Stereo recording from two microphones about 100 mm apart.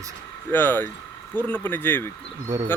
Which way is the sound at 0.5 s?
20° left (ahead or behind).